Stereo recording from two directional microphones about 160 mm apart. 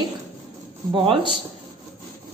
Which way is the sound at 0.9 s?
35° right (ahead or behind).